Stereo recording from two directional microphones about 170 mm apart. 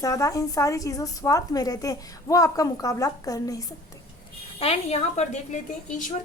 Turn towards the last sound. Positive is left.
turn(degrees=45)  # may be behind; listen again after turning